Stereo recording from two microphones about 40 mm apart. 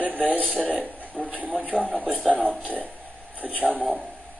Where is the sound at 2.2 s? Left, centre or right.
Left.